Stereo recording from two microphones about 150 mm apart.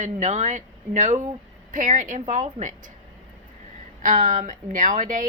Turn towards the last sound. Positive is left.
turn(degrees=-60)  # may be behind; listen again after turning